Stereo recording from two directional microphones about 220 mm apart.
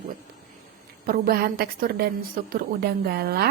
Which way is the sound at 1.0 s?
45° right (ahead or behind).